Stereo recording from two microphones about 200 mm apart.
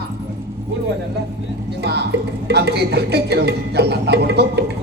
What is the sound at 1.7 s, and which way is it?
Speech, 55° right (ahead or behind).